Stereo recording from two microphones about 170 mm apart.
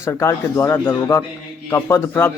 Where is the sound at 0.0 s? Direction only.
15° left (ahead or behind).